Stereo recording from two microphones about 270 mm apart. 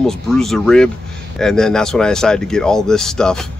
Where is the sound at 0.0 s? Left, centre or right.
Centre.